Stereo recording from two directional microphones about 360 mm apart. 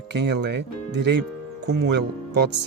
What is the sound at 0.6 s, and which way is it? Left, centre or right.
Speech, right.